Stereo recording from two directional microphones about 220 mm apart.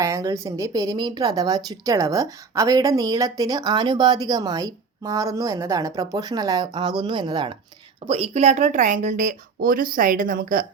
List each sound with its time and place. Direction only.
0.0 s speech: 15° right (ahead or behind); by 10.7 s 40° right (ahead or behind)